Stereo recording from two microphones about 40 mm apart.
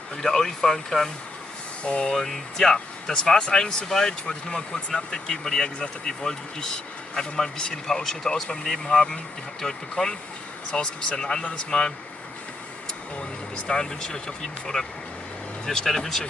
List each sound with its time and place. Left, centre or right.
0.2 s speech: centre
1.9 s speech: left
2.1 s speech: centre
10.7 s speech: left
13.7 s speech: centre